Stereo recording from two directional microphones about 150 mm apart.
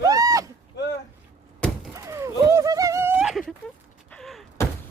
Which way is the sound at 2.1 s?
20° right (ahead or behind).